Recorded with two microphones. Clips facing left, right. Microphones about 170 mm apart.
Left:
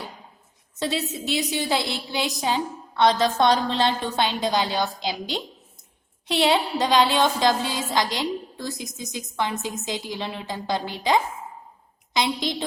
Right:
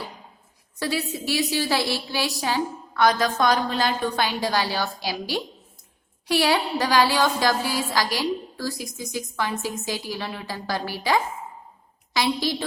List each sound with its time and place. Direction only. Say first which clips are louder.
0.8 s a woman's voice: even; 20° left (ahead or behind)